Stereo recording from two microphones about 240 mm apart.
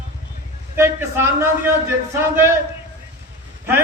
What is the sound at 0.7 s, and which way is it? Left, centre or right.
A man's voice, centre.